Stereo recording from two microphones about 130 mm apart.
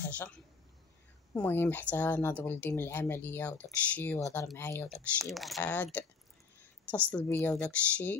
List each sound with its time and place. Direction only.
1.3 s speech: 15° left (ahead or behind)
4.8 s speech: centre (ahead or behind)
5.6 s speech: 10° left (ahead or behind)
7.1 s speech: 15° left (ahead or behind)